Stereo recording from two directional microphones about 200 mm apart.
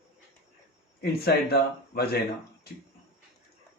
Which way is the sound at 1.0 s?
50° left (ahead or behind).